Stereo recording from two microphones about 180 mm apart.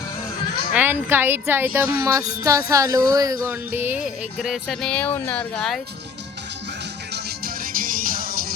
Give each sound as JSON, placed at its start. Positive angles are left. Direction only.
{"t": 0.7, "sound": "speech", "side_deg": -10}
{"t": 3.4, "sound": "music", "side_deg": -10}
{"t": 7.1, "sound": "music", "side_deg": -60}